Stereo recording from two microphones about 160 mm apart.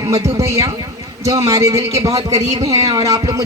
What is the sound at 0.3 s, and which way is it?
A man's voice, 20° right (ahead or behind).